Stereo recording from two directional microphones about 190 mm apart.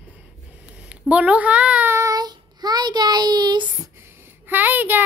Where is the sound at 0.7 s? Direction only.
5° right (ahead or behind).